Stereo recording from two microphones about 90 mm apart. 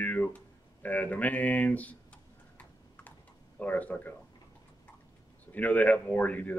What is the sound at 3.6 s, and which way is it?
Speech, 15° left (ahead or behind).